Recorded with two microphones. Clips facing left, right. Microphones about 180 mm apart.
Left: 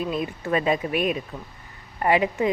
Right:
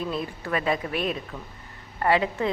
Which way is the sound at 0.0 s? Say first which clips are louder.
Left 3 dB; 15° left (ahead or behind).